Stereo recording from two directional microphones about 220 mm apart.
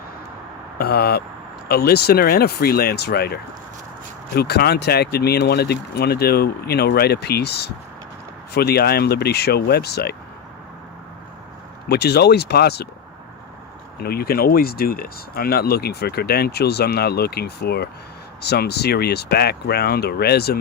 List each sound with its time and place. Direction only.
0.8 s speech: 45° left (ahead or behind)
11.9 s speech: 50° left (ahead or behind)
14.0 s speech: 45° left (ahead or behind)